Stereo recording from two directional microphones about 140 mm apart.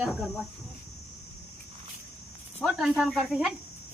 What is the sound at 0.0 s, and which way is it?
Speech, centre (ahead or behind).